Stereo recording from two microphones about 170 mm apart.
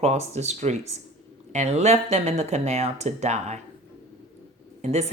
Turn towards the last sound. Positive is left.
turn(degrees=-40)  # may be behind; listen again after turning